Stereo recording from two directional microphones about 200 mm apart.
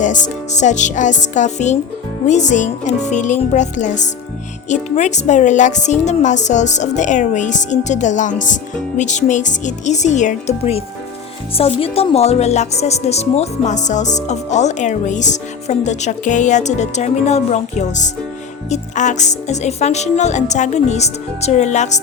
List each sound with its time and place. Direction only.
0.0 s speech: 40° left (ahead or behind)